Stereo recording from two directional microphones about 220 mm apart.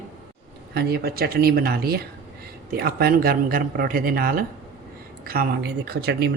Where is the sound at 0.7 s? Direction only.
45° right (ahead or behind).